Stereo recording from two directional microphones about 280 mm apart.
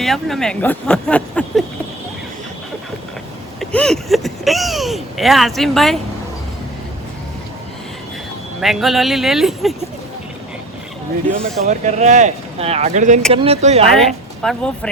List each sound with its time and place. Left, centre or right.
0.0 s speech: centre
3.6 s speech: centre
8.6 s speech: centre
11.6 s speech: right
13.8 s a woman's voice: centre